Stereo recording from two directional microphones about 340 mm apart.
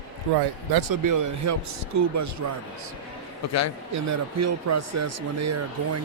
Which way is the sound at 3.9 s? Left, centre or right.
Right.